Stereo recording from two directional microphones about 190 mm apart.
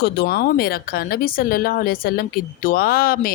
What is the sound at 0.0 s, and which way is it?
A woman's voice, 60° left (ahead or behind).